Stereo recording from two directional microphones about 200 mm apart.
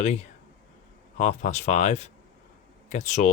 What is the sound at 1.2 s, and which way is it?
Speech, 35° left (ahead or behind).